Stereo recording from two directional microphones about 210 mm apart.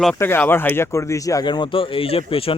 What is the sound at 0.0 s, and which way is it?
Speech, 5° left (ahead or behind).